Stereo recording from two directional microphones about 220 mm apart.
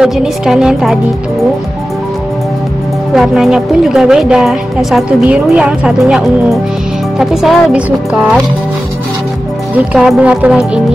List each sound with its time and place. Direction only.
0.0 s a woman's voice: 5° right (ahead or behind)
3.2 s a woman's voice: centre (ahead or behind)
9.9 s a woman's voice: 5° right (ahead or behind)